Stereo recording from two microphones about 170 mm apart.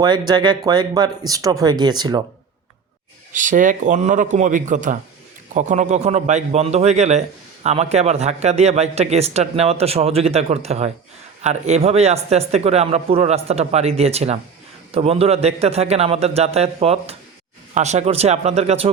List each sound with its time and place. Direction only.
0.0 s speech: 25° right (ahead or behind)
3.3 s a man's voice: 50° right (ahead or behind)